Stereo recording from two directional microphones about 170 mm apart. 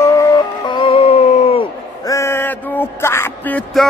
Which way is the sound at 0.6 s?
30° left (ahead or behind).